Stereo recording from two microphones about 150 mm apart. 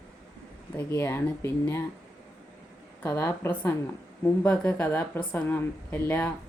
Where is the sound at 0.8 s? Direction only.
15° left (ahead or behind).